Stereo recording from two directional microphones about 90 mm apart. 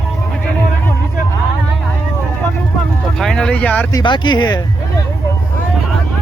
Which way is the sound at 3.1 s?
5° left (ahead or behind).